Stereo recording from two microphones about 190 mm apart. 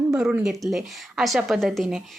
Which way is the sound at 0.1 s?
5° right (ahead or behind).